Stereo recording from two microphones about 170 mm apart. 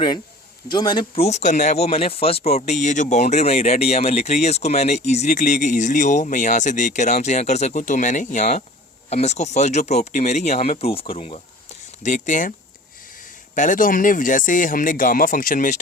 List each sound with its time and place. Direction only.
0.7 s speech: 25° left (ahead or behind); by 12.5 s 50° left (ahead or behind)
13.6 s speech: 50° left (ahead or behind)